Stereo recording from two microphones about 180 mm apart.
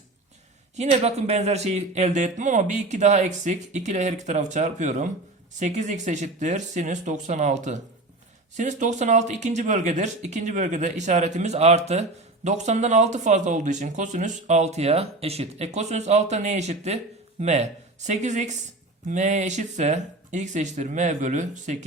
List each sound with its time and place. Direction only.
0.8 s speech: 35° right (ahead or behind)